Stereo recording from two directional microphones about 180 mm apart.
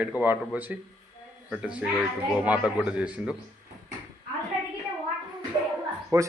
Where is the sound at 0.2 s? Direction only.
10° right (ahead or behind).